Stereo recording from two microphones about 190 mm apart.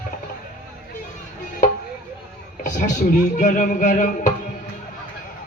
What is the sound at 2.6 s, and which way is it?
Speech, 40° left (ahead or behind).